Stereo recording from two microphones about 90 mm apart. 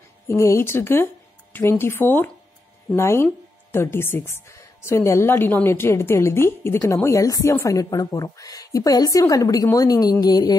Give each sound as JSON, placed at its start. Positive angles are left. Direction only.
{"t": 0.3, "sound": "a woman's voice", "side_deg": 30}
{"t": 10.2, "sound": "music", "side_deg": 50}